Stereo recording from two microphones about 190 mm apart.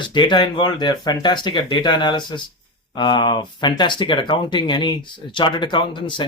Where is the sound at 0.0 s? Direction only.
25° left (ahead or behind).